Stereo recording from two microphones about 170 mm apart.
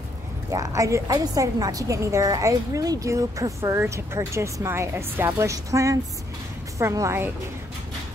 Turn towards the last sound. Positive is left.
turn(degrees=-15)  # may be behind; listen again after turning